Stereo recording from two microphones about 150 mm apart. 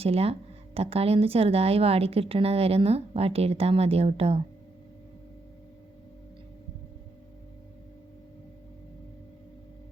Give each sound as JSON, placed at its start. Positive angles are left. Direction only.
{"t": 0.0, "sound": "speech", "side_deg": -40}